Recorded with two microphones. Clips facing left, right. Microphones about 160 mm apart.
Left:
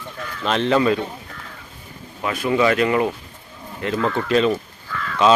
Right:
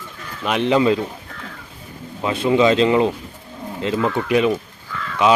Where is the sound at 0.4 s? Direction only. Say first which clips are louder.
Right 1 dB; 15° right (ahead or behind).